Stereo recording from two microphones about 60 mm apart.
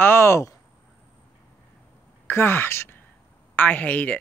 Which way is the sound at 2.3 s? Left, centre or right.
Left.